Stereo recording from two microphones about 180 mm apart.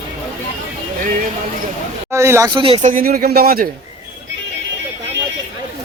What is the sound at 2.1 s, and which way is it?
Speech, 15° right (ahead or behind).